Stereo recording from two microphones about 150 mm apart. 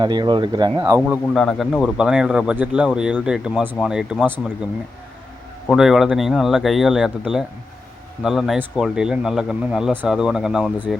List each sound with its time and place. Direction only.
0.0 s speech: 30° right (ahead or behind)
1.3 s speech: 5° left (ahead or behind)
5.7 s speech: centre (ahead or behind)